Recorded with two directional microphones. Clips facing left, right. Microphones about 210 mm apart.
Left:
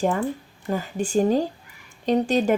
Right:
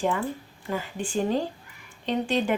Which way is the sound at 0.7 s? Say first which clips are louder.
Left 5 dB; 40° left (ahead or behind).